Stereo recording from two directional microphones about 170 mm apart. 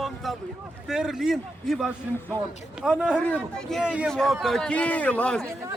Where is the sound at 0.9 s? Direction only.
5° right (ahead or behind).